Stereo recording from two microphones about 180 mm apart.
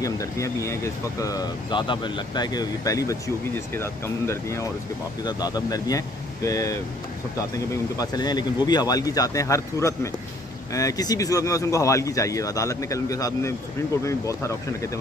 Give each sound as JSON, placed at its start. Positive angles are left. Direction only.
{"t": 0.0, "sound": "speech", "side_deg": 20}